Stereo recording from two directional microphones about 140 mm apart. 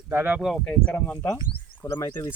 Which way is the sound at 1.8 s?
20° left (ahead or behind).